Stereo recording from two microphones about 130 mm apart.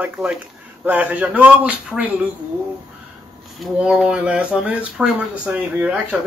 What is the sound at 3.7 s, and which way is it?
A man's voice, 10° right (ahead or behind).